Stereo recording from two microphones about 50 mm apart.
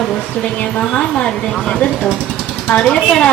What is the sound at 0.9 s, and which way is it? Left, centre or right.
Speech, centre.